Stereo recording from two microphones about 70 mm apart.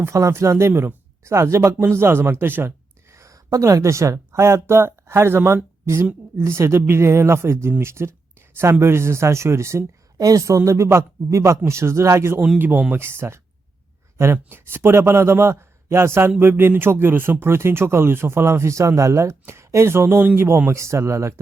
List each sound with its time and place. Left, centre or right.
0.0 s speech: right
0.7 s speech: right
1.2 s a woman's voice: right
10.2 s speech: right
12.5 s speech: right
20.7 s speech: right